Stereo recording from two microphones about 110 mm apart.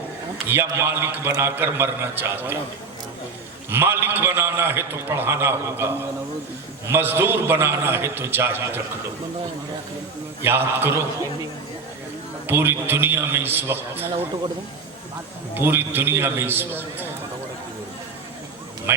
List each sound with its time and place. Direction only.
0.4 s a man's voice: 20° right (ahead or behind)
3.7 s a man's voice: 20° right (ahead or behind)
10.4 s a man's voice: 20° right (ahead or behind)
12.5 s a man's voice: 20° right (ahead or behind)
15.5 s a man's voice: 20° right (ahead or behind)
18.9 s a man's voice: 25° right (ahead or behind)